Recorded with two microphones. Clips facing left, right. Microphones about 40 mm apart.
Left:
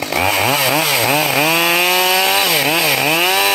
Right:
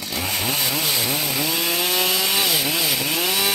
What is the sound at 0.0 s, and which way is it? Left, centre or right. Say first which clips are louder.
Chainsaw: left 10 dB; left.